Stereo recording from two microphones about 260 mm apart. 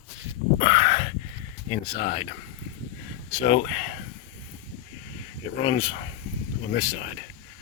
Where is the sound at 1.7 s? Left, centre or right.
Centre.